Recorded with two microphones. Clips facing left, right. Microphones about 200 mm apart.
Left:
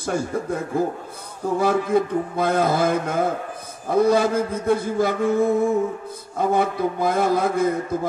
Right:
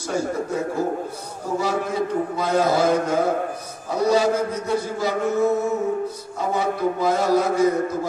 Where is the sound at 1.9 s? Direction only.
55° left (ahead or behind).